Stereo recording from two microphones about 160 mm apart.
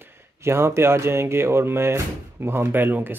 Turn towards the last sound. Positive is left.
turn(degrees=-10)  # may be behind; listen again after turning